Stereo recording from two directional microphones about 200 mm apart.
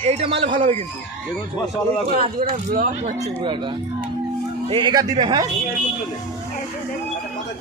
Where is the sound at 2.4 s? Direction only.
45° right (ahead or behind).